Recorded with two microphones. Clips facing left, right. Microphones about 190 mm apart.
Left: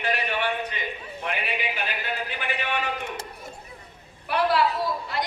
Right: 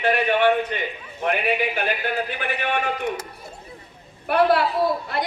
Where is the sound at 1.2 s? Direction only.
55° right (ahead or behind).